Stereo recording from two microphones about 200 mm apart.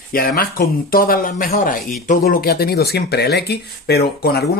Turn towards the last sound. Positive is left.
turn(degrees=50)  # may be behind; listen again after turning